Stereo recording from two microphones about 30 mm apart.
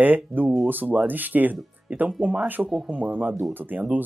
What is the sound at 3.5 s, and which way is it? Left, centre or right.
Speech, right.